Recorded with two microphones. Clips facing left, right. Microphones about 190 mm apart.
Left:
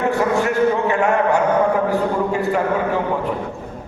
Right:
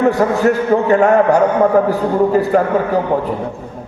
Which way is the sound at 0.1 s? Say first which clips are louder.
Right 4 dB; 40° right (ahead or behind).